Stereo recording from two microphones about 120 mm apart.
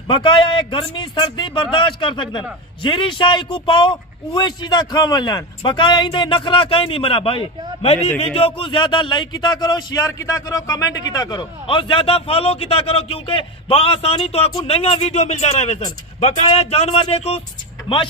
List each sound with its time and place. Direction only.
0.1 s a man's voice: 45° left (ahead or behind); by 15.8 s 65° left (ahead or behind)
16.5 s speech: 55° left (ahead or behind)